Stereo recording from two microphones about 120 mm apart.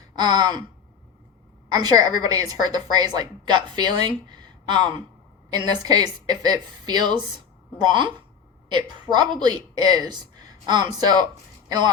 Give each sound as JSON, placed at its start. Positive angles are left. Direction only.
{"t": 0.2, "sound": "a woman's voice", "side_deg": -35}
{"t": 1.7, "sound": "a woman's voice", "side_deg": -35}